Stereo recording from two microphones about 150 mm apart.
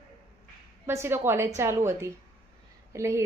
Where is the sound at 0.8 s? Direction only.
15° right (ahead or behind).